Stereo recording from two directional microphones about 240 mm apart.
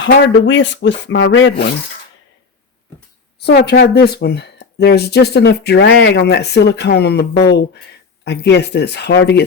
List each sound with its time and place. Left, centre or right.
0.0 s speech: left
3.3 s speech: left